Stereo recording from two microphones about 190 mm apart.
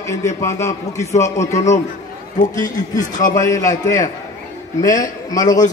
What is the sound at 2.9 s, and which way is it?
Speech, 40° left (ahead or behind).